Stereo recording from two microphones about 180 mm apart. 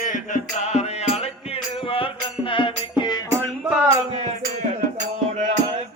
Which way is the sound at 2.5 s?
25° left (ahead or behind).